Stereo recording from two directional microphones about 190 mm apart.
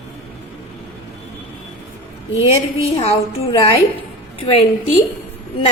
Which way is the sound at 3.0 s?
30° left (ahead or behind).